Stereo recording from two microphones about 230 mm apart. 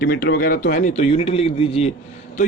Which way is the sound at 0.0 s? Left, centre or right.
Left.